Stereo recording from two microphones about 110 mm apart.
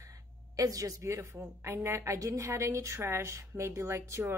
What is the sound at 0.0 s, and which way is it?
A woman's voice, 30° right (ahead or behind).